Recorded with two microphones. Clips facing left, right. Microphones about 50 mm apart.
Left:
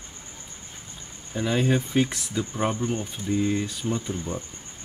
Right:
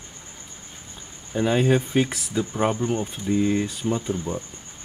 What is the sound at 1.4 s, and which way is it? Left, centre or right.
Speech, centre.